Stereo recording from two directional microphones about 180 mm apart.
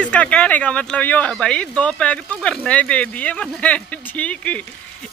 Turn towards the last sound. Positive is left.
turn(degrees=10)  # may be behind; listen again after turning